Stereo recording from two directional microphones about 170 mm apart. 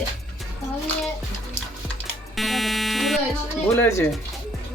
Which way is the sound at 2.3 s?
Centre (ahead or behind).